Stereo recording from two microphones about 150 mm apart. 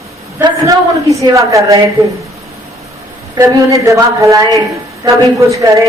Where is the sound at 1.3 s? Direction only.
20° right (ahead or behind).